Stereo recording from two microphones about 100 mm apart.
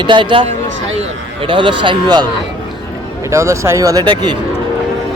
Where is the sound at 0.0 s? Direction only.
55° right (ahead or behind).